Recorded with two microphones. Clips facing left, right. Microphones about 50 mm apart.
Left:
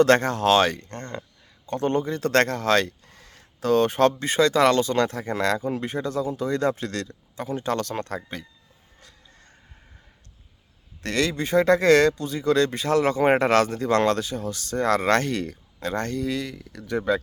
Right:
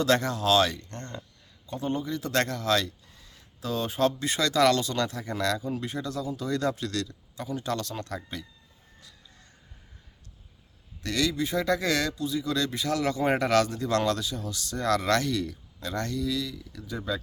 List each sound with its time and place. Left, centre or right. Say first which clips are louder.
0.0 s speech: left 7 dB; left
1.6 s a man's voice: left 7 dB; left
2.0 s a man's voice: left 6 dB; left
11.0 s speech: left 3 dB; left